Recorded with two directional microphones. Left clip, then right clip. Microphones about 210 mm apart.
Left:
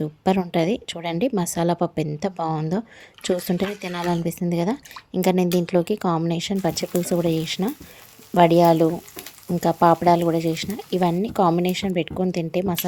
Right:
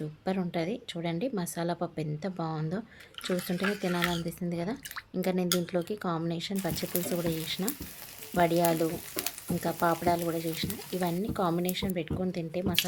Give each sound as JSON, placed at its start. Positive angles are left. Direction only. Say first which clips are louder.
{"t": 0.0, "sound": "speech", "louder": "left 11 dB", "side_deg": 35}